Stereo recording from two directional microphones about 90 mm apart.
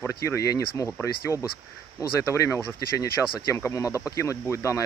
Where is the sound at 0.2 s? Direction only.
35° left (ahead or behind).